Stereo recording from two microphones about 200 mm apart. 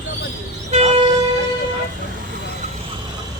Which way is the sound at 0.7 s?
35° right (ahead or behind).